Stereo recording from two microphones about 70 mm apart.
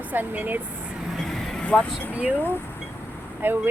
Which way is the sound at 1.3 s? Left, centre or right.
Centre.